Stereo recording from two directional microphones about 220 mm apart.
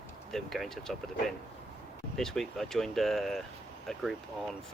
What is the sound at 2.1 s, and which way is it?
Speech, centre (ahead or behind).